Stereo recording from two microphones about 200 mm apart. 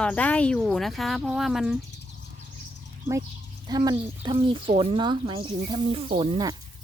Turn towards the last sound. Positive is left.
turn(degrees=-25)  # may be behind; listen again after turning